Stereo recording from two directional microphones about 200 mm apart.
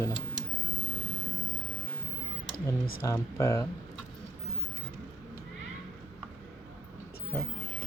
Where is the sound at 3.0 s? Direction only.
15° left (ahead or behind).